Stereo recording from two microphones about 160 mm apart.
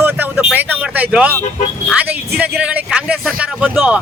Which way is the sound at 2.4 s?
10° right (ahead or behind).